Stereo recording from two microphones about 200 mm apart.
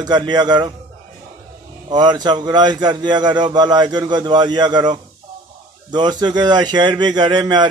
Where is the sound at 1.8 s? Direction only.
20° right (ahead or behind).